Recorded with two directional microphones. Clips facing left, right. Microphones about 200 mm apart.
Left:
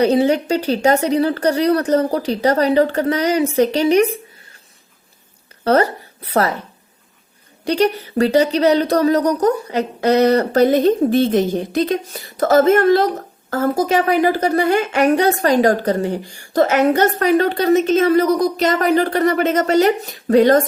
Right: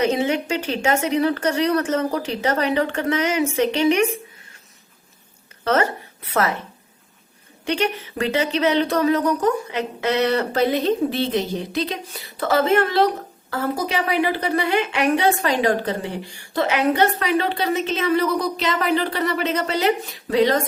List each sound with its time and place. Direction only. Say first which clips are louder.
0.0 s speech: left 6 dB; 35° left (ahead or behind)
5.6 s a woman's voice: left 5 dB; 35° left (ahead or behind)
7.6 s speech: left 6 dB; 35° left (ahead or behind)